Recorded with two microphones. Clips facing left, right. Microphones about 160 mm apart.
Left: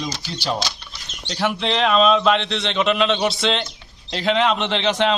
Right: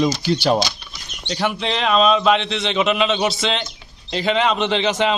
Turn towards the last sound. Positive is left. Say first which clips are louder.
# right 1 dB
turn(degrees=-5)  # may be behind; listen again after turning